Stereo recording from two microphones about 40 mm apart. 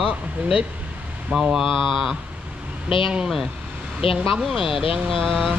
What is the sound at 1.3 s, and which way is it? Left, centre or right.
Speech, centre.